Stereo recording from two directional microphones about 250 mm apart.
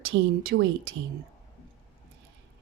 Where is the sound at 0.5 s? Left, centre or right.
Right.